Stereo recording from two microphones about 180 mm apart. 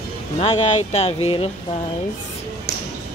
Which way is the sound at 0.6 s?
40° left (ahead or behind).